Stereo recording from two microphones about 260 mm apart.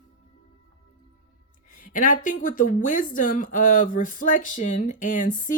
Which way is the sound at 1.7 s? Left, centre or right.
Left.